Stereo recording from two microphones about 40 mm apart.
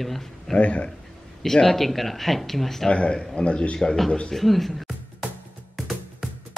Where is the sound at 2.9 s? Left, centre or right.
Left.